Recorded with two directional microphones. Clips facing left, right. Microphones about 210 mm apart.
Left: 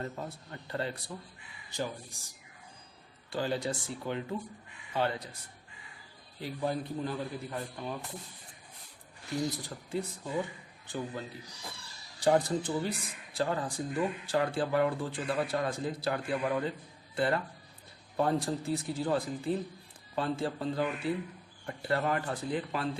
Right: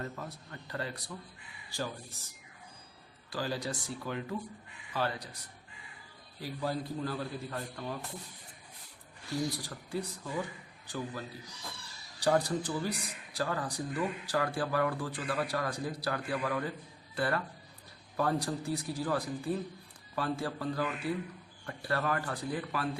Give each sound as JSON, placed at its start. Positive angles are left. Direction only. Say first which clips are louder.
{"t": 0.0, "sound": "speech", "louder": "left 2 dB", "side_deg": 25}
{"t": 3.2, "sound": "speech", "louder": "left 3 dB", "side_deg": 25}
{"t": 6.4, "sound": "speech", "louder": "left 2 dB", "side_deg": 20}
{"t": 9.6, "sound": "speech", "louder": "left 2 dB", "side_deg": 25}
{"t": 12.2, "sound": "speech", "louder": "left 2 dB", "side_deg": 25}